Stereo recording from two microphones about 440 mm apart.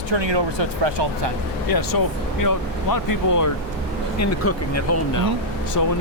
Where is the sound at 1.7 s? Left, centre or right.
Left.